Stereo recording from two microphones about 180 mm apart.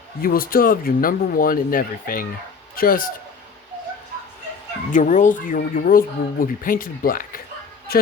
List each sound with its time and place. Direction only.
0.2 s a man's voice: 55° left (ahead or behind)
4.9 s speech: 45° left (ahead or behind)